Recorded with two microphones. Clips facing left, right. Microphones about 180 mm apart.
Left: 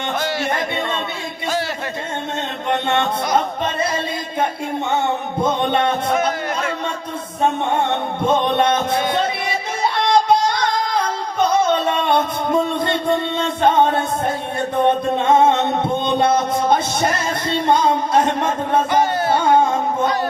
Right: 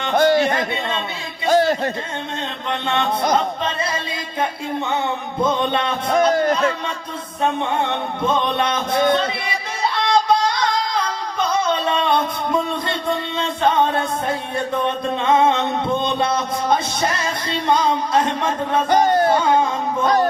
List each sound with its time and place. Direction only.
0.2 s a sound: 50° right (ahead or behind)
1.5 s a sound: 50° right (ahead or behind)
2.6 s music: 50° left (ahead or behind)
5.5 s music: 50° left (ahead or behind)
6.1 s a sound: 45° right (ahead or behind)
7.8 s music: 50° left (ahead or behind)
10.0 s music: 50° left (ahead or behind)
11.9 s music: 50° left (ahead or behind)
14.8 s music: 50° left (ahead or behind)
18.9 s music: 45° right (ahead or behind)